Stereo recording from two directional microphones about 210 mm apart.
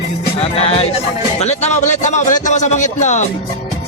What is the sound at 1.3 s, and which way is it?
A man's voice, 30° left (ahead or behind).